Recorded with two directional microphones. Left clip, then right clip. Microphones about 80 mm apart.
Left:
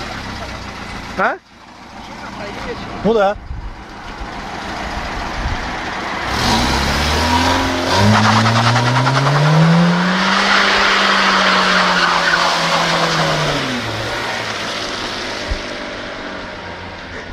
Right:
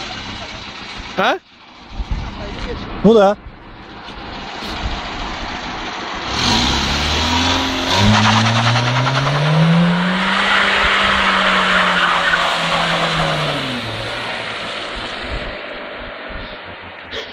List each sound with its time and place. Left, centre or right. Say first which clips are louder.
1.1 s speech: right 1 dB; centre
3.1 s speech: right 3 dB; right
6.2 s vehicle: even; centre
6.8 s vehicle: left 1 dB; left
8.2 s vehicle: left 1 dB; left